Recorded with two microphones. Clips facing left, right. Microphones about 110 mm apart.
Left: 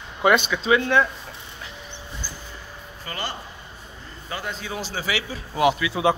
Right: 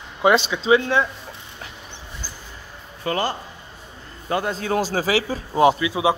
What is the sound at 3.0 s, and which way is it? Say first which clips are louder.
Speech: right 9 dB; 65° right (ahead or behind).